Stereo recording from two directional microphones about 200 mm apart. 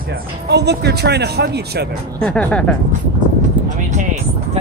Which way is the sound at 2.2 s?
5° left (ahead or behind).